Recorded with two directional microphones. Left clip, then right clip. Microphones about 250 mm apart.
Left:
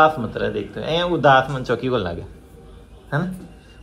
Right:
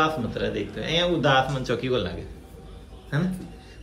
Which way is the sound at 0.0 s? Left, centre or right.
Centre.